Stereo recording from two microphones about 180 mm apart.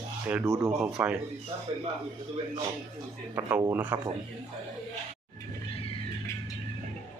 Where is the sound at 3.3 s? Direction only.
15° right (ahead or behind).